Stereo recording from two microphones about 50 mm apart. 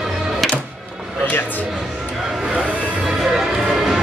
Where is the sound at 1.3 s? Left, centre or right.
Left.